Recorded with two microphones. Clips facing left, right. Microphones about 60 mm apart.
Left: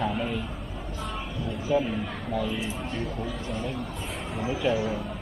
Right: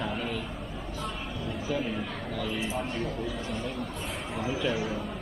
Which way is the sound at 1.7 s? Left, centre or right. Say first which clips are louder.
Left 7 dB; centre.